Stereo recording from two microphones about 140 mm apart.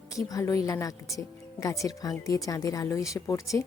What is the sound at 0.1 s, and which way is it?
Speech, 25° left (ahead or behind).